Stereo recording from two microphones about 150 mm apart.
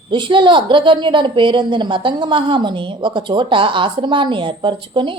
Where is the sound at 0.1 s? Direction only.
35° right (ahead or behind).